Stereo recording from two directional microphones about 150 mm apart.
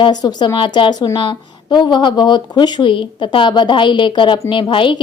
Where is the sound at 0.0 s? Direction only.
30° left (ahead or behind).